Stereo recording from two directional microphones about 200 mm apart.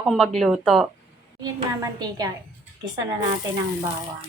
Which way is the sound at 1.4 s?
20° right (ahead or behind).